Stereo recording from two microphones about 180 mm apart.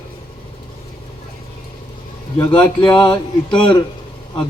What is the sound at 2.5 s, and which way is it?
A man's voice, 25° left (ahead or behind).